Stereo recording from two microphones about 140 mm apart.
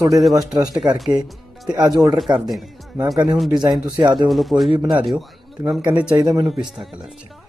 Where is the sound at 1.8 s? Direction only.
25° right (ahead or behind).